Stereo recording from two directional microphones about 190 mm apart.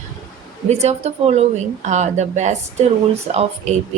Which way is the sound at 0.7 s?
35° right (ahead or behind).